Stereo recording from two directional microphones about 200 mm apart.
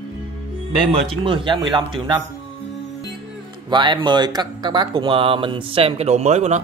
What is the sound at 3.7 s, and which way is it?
A man's voice, 25° right (ahead or behind).